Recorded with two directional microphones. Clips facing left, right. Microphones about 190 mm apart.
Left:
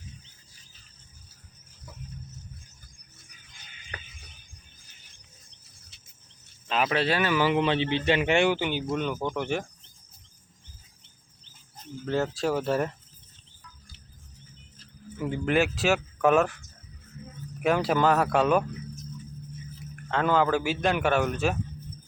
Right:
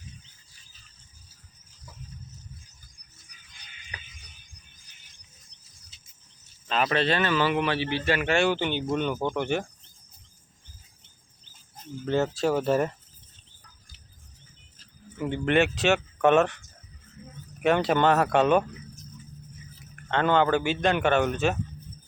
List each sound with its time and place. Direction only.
3.2 s a sound: 45° left (ahead or behind)
6.7 s a man's voice: 5° left (ahead or behind)
12.0 s a man's voice: centre (ahead or behind)
15.2 s a man's voice: centre (ahead or behind)
17.6 s a man's voice: centre (ahead or behind)
20.1 s a man's voice: centre (ahead or behind)